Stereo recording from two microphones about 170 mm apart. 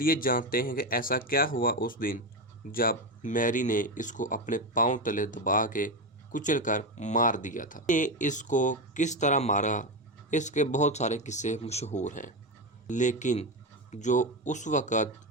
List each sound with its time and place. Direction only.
0.0 s speech: 55° left (ahead or behind)